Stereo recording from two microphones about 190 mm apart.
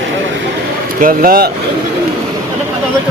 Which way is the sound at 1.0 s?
50° right (ahead or behind).